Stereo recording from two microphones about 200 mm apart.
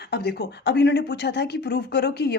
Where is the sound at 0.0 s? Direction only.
55° left (ahead or behind).